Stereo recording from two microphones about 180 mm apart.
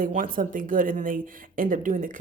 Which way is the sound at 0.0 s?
50° right (ahead or behind).